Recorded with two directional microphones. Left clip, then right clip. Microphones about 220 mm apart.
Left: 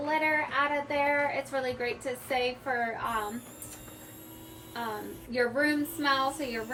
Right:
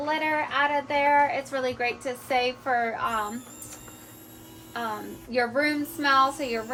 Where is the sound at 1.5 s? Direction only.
25° right (ahead or behind).